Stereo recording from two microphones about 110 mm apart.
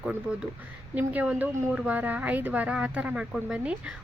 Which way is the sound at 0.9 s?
15° right (ahead or behind).